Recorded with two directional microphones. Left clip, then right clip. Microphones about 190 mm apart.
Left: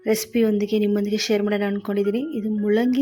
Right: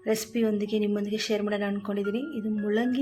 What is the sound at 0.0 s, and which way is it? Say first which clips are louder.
Speech: left 6 dB; 40° left (ahead or behind).